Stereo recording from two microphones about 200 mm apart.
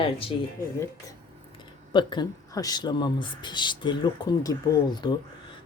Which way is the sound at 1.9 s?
20° left (ahead or behind).